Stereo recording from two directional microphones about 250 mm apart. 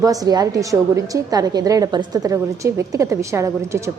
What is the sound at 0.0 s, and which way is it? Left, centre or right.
A woman's voice, centre.